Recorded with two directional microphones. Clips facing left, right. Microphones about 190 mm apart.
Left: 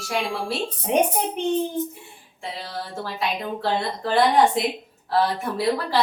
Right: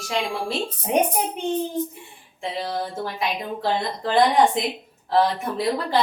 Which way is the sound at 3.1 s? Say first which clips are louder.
Left 4 dB; 15° right (ahead or behind).